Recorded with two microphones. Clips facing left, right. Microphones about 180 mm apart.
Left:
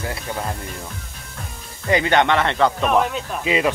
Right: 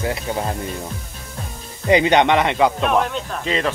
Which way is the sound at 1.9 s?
20° right (ahead or behind).